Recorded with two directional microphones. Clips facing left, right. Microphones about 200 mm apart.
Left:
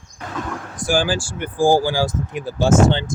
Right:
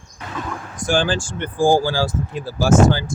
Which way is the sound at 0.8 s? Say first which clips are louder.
Even; 10° left (ahead or behind).